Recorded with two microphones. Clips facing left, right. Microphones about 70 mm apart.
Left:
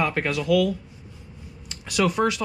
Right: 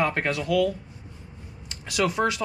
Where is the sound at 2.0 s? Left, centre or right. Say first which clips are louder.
Left 2 dB; right.